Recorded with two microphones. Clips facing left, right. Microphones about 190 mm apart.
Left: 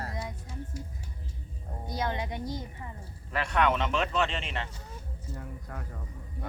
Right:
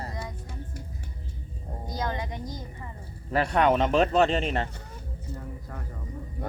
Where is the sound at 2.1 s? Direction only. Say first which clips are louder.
Even; 25° left (ahead or behind).